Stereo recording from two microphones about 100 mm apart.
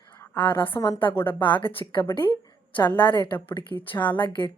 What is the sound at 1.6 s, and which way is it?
Speech, 60° left (ahead or behind).